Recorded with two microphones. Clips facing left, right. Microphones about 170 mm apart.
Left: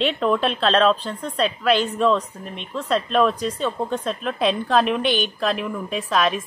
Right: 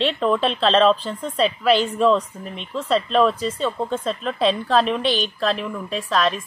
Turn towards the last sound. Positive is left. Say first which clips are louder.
# even
turn(degrees=5)  # may be behind; listen again after turning